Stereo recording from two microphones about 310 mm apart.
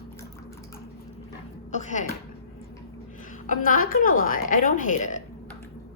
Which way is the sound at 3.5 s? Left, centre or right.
Left.